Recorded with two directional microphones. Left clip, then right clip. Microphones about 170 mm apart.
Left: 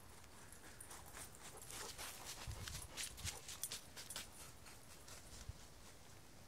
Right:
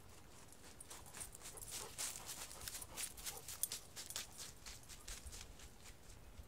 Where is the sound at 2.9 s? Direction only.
Centre (ahead or behind).